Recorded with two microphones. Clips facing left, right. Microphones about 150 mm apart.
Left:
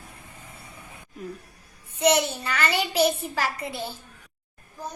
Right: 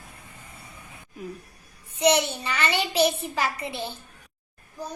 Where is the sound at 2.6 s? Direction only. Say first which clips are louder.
Even; 30° right (ahead or behind).